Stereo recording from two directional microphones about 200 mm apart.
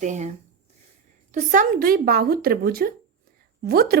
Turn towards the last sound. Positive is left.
turn(degrees=-50)  # may be behind; listen again after turning